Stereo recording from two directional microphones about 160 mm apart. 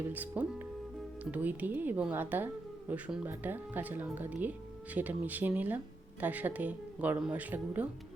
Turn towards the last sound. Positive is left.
turn(degrees=-10)  # may be behind; listen again after turning